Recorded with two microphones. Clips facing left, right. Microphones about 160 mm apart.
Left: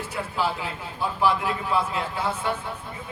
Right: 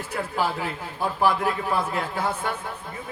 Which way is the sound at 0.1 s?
50° right (ahead or behind).